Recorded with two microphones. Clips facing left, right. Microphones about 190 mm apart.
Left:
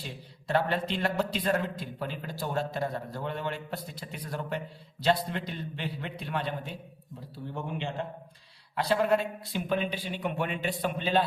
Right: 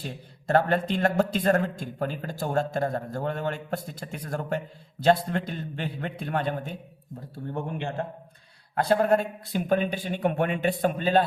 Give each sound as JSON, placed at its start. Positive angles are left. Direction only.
{"t": 0.0, "sound": "a man's voice", "side_deg": -50}